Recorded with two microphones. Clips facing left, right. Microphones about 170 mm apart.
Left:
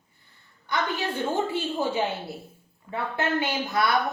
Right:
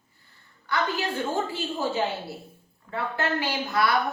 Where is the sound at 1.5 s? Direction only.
20° left (ahead or behind).